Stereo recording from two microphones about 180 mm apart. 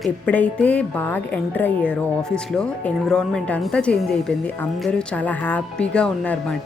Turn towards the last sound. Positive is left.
turn(degrees=5)  # may be behind; listen again after turning